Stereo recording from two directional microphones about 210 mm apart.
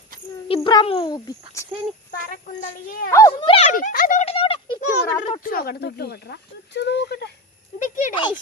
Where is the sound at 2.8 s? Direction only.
45° left (ahead or behind).